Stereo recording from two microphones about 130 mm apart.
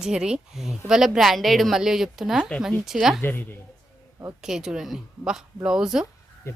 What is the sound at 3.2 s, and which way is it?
Speech, 15° left (ahead or behind).